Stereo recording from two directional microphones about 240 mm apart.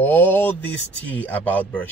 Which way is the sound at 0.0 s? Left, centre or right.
Centre.